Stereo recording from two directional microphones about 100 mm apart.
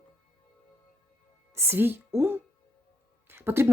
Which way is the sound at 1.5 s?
25° right (ahead or behind).